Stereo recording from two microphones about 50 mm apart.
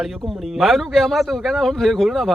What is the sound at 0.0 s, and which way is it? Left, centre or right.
Speech, centre.